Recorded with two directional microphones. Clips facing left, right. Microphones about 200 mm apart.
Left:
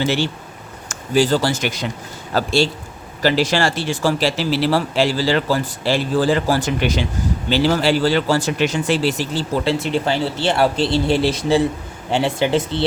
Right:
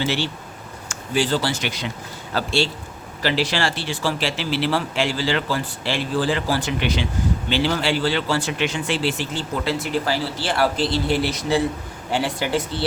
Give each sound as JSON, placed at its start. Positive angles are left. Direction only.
{"t": 0.0, "sound": "a man's voice", "side_deg": 45}
{"t": 9.8, "sound": "speech", "side_deg": 25}